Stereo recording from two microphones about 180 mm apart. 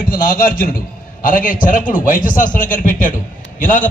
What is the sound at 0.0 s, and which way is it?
A man's voice, 50° left (ahead or behind).